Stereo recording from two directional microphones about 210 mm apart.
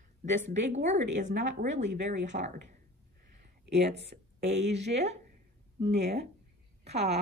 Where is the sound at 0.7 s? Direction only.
35° right (ahead or behind).